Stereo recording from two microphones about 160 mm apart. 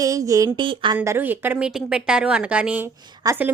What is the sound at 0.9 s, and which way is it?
A woman's voice, 15° right (ahead or behind).